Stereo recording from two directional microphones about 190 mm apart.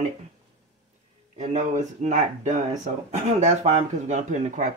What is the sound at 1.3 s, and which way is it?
A man's voice, 40° right (ahead or behind).